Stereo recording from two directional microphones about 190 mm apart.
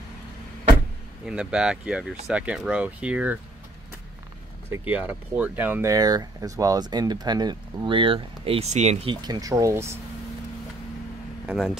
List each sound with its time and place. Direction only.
1.2 s speech: 5° right (ahead or behind)
4.6 s speech: 10° right (ahead or behind); by 9.1 s 35° right (ahead or behind)
9.2 s speech: 20° right (ahead or behind)
11.4 s speech: centre (ahead or behind)